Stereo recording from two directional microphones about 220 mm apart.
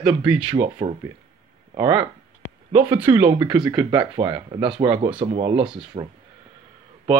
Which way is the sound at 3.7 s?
20° right (ahead or behind).